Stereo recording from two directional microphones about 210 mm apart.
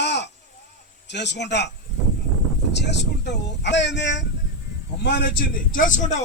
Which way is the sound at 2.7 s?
55° left (ahead or behind).